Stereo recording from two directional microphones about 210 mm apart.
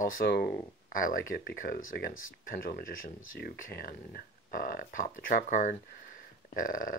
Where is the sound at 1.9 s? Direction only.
45° left (ahead or behind).